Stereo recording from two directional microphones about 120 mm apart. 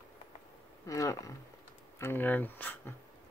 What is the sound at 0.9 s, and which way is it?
Speech, 25° left (ahead or behind).